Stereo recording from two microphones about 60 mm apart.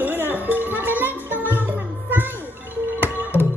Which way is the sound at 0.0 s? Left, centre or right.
Right.